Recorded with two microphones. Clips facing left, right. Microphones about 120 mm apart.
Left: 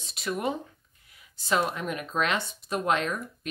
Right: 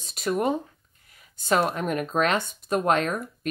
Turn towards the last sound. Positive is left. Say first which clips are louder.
# right 4 dB
turn(degrees=-45)  # may be behind; listen again after turning